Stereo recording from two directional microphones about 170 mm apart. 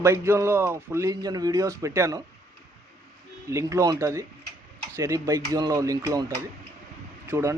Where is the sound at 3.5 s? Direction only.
20° right (ahead or behind).